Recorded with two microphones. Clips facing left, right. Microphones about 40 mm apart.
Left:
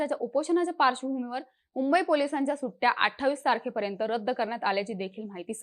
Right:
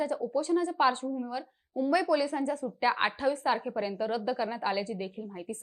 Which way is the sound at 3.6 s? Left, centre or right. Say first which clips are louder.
Left 1 dB; left.